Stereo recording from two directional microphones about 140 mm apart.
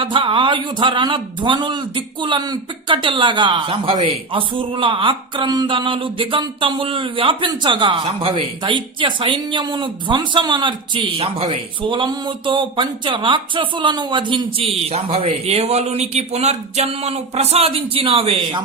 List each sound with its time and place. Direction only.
0.0 s speech: 40° right (ahead or behind)